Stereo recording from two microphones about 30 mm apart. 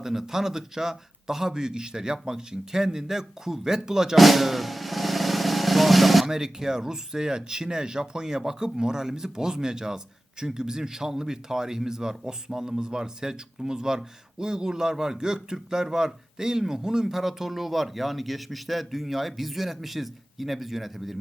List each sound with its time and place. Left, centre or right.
0.0 s a man's voice: centre
4.2 s vehicle: centre
6.2 s a man's voice: centre